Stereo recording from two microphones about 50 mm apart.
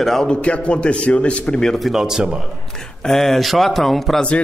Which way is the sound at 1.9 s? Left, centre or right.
Centre.